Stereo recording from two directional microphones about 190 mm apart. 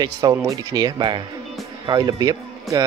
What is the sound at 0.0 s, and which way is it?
Speech, 20° right (ahead or behind).